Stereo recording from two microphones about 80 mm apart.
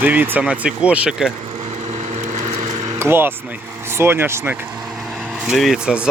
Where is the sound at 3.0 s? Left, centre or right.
Right.